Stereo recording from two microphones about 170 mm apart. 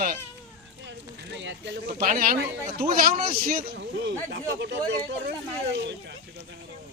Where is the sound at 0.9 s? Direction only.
90° right.